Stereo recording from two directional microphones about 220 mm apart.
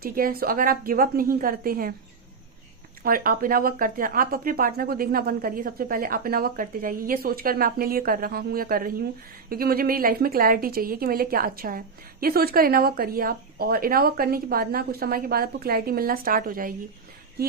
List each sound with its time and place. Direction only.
0.0 s speech: 40° right (ahead or behind)
3.0 s a woman's voice: 40° right (ahead or behind)